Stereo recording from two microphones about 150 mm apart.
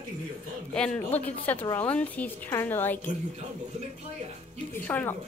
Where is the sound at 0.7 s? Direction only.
10° left (ahead or behind).